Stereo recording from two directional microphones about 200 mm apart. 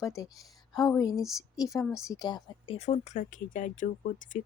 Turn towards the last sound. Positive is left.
turn(degrees=40)  # may be behind; listen again after turning